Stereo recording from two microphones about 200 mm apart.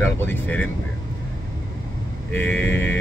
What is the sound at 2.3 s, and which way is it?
Speech, 10° left (ahead or behind).